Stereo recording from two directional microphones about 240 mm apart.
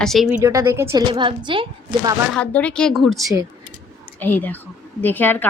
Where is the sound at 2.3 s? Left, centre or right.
Centre.